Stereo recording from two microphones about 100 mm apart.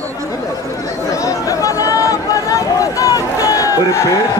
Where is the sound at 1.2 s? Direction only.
35° left (ahead or behind).